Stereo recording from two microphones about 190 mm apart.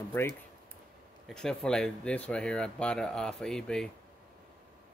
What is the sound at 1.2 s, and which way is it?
Speech, 5° left (ahead or behind).